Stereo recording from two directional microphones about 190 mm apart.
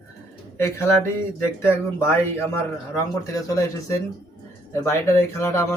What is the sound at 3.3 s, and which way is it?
Speech, 15° left (ahead or behind).